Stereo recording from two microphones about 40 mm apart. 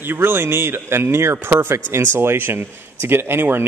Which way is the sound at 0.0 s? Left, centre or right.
Right.